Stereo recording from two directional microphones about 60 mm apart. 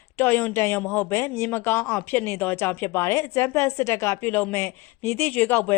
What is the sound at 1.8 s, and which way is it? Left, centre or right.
A woman's voice, left.